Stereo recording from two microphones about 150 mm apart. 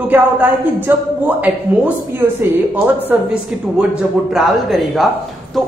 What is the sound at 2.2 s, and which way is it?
Speech, 15° right (ahead or behind).